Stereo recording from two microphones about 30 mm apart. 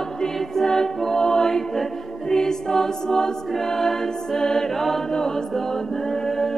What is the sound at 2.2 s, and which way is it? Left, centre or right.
Music, centre.